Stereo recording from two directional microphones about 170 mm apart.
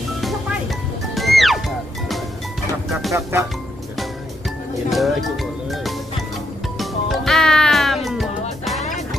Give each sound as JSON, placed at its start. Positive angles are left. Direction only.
{"t": 1.1, "sound": "music", "side_deg": 0}
{"t": 4.9, "sound": "music", "side_deg": 0}
{"t": 8.8, "sound": "music", "side_deg": 45}